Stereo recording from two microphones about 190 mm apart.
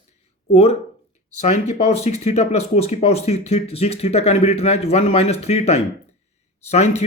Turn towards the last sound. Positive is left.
turn(degrees=35)  # may be behind; listen again after turning